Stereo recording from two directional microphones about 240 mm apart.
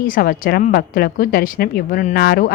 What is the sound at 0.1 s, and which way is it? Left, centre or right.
A woman's voice, left.